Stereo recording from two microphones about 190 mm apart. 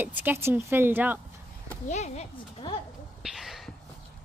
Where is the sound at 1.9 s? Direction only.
35° left (ahead or behind).